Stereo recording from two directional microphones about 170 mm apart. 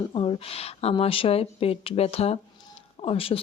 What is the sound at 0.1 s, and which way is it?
Speech, 35° left (ahead or behind).